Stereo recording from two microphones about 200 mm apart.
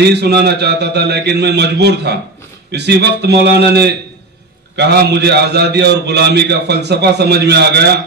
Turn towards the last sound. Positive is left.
turn(degrees=-55)  # may be behind; listen again after turning